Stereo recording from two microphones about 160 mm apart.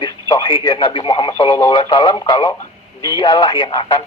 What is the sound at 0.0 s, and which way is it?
Speech, 25° left (ahead or behind).